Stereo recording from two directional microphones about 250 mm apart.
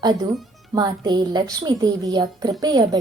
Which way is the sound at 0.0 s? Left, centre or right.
Centre.